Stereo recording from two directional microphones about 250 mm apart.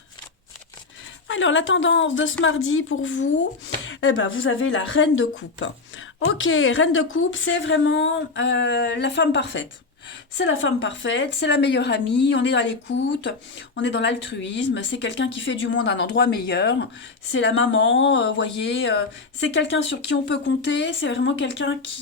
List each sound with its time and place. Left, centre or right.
1.3 s speech: left